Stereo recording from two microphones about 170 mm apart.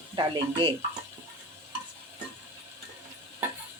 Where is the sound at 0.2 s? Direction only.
30° right (ahead or behind).